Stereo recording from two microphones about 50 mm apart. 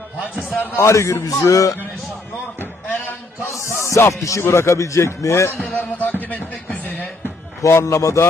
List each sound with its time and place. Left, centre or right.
0.8 s a man's voice: left
3.5 s rapping: left
4.4 s speech: left
5.7 s speech: left
7.6 s speech: left